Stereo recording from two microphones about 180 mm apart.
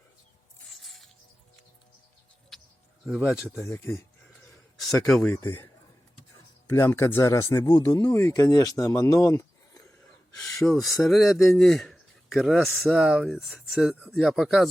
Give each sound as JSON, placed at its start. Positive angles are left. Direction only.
{"t": 0.7, "sound": "music", "side_deg": 0}
{"t": 2.5, "sound": "bird", "side_deg": 0}
{"t": 3.6, "sound": "speech", "side_deg": 15}
{"t": 5.0, "sound": "speech", "side_deg": 5}
{"t": 5.3, "sound": "speech", "side_deg": 15}
{"t": 10.3, "sound": "gasp", "side_deg": 15}
{"t": 10.6, "sound": "speech", "side_deg": 0}